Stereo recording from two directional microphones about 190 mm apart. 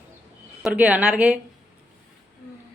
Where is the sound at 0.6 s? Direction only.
10° right (ahead or behind).